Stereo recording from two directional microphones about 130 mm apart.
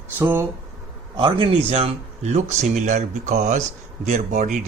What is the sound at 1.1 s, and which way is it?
Speech, 40° right (ahead or behind).